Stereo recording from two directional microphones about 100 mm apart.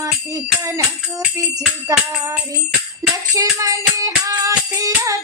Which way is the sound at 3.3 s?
35° right (ahead or behind).